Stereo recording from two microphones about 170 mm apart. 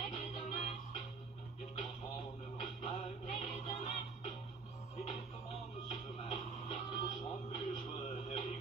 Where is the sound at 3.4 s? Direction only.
35° left (ahead or behind).